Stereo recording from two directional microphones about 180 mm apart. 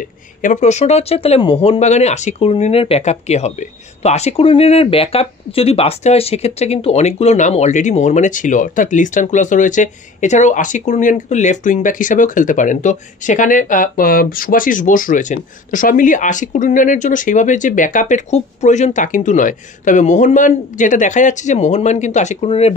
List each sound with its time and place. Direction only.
0.4 s speech: 45° left (ahead or behind)